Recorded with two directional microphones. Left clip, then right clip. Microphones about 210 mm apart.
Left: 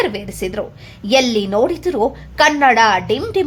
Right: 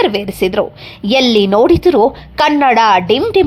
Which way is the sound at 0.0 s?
30° right (ahead or behind).